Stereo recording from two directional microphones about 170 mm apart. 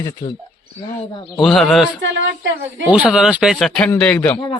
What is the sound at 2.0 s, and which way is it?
Speech, 90° right.